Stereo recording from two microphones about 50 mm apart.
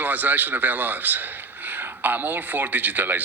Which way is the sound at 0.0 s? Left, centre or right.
Right.